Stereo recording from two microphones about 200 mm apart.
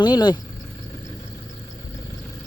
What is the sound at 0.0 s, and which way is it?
Speech, 20° left (ahead or behind).